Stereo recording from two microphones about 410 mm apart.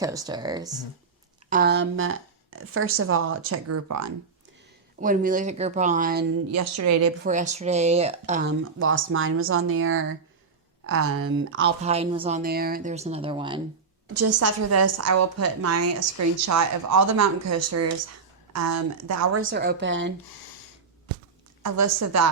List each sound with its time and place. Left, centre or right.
0.0 s speech: centre
1.5 s a woman's voice: right
4.9 s speech: centre
6.5 s a woman's voice: right
7.3 s a woman's voice: centre
11.8 s speech: centre
14.1 s a woman's voice: right
19.0 s speech: right
21.8 s a woman's voice: right